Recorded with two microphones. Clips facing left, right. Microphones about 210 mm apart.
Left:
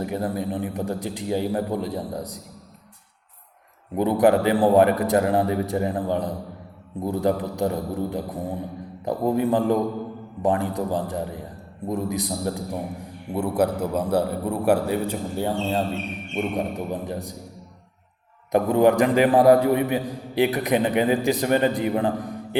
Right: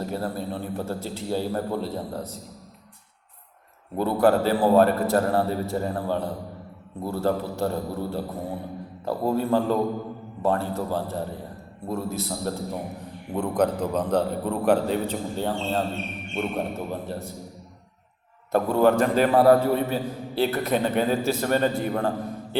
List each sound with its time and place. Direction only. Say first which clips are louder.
0.0 s a man's voice: left 3 dB; 15° left (ahead or behind)
3.9 s a man's voice: left 2 dB; 15° left (ahead or behind)
18.5 s a man's voice: left 2 dB; 15° left (ahead or behind)